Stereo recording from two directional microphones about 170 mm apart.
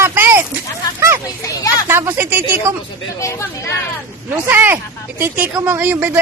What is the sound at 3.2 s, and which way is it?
Speech, 15° left (ahead or behind).